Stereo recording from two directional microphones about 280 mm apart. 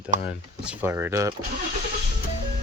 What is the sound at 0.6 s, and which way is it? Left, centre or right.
Speech, centre.